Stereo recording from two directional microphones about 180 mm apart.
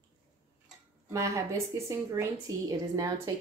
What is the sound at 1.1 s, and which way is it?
Speech, 15° right (ahead or behind).